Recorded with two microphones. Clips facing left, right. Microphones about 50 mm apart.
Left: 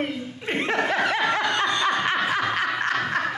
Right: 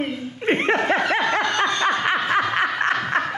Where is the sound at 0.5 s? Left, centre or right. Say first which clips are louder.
Right 6 dB; right.